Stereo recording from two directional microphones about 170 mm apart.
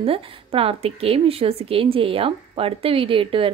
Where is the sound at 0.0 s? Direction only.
30° right (ahead or behind).